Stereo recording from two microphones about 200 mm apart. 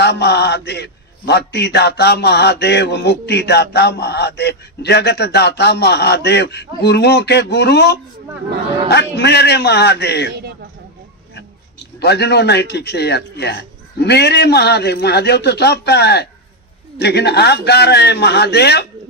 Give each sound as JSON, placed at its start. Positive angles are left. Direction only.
{"t": 0.0, "sound": "a man's voice", "side_deg": 55}
{"t": 11.9, "sound": "a man's voice", "side_deg": 55}